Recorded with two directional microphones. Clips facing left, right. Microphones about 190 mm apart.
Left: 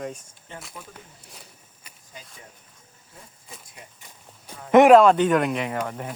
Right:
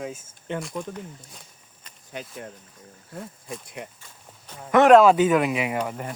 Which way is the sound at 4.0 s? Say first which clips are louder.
Even; 10° left (ahead or behind).